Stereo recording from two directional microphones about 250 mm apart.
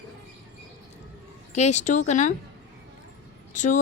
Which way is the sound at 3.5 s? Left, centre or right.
Left.